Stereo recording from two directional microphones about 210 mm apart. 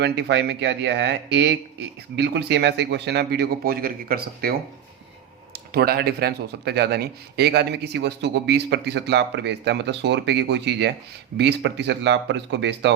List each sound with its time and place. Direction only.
0.0 s speech: 55° right (ahead or behind)
5.5 s speech: 45° right (ahead or behind)